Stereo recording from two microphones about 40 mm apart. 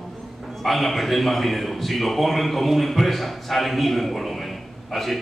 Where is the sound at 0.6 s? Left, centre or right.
Centre.